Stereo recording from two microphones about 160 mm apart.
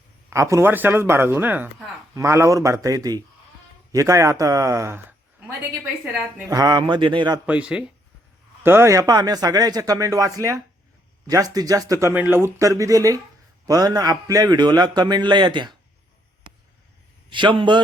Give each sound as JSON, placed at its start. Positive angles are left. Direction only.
{"t": 0.3, "sound": "a man's voice", "side_deg": -20}
{"t": 6.5, "sound": "a man's voice", "side_deg": -25}
{"t": 7.4, "sound": "a man's voice", "side_deg": -5}
{"t": 17.3, "sound": "a man's voice", "side_deg": -30}